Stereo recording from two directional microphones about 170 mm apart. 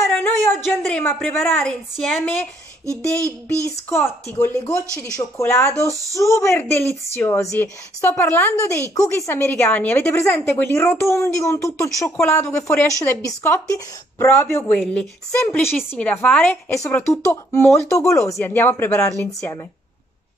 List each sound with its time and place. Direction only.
0.1 s a woman's voice: 5° left (ahead or behind)
3.9 s a woman's voice: 15° left (ahead or behind)
4.8 s speech: 15° right (ahead or behind)
5.1 s a woman's voice: 15° left (ahead or behind)
5.9 s speech: 20° right (ahead or behind)
6.1 s a woman's voice: 15° left (ahead or behind)